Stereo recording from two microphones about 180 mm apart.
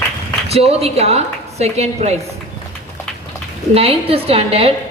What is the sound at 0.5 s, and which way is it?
A woman's voice, 35° right (ahead or behind).